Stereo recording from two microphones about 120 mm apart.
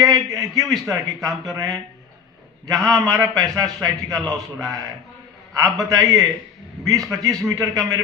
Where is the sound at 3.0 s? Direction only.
35° right (ahead or behind).